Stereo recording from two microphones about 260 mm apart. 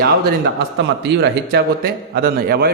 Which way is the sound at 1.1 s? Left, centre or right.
Right.